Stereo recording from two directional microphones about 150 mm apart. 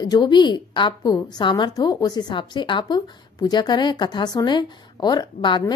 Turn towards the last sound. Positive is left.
turn(degrees=30)  # may be behind; listen again after turning